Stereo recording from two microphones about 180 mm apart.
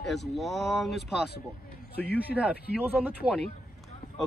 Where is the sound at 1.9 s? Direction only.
60° left (ahead or behind).